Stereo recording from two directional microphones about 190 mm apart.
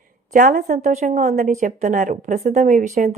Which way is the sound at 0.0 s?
45° right (ahead or behind).